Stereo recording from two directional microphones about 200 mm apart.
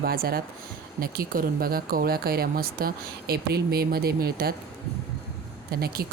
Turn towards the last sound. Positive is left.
turn(degrees=-50)  # may be behind; listen again after turning